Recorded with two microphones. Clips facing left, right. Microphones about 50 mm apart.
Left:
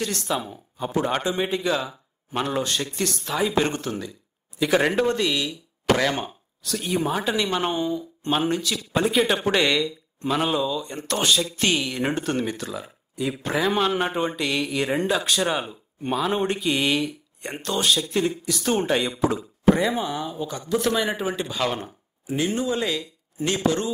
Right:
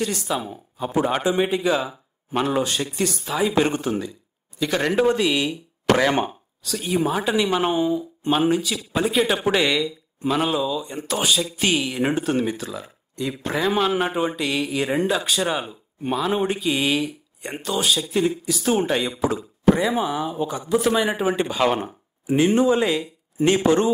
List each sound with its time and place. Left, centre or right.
0.0 s speech: centre
4.6 s speech: centre
4.9 s speech: centre
6.6 s speech: centre; by 23.9 s right